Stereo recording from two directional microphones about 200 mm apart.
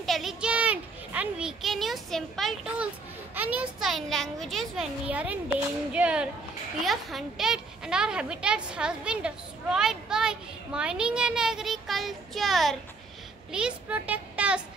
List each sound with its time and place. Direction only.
0.0 s a child's voice: centre (ahead or behind)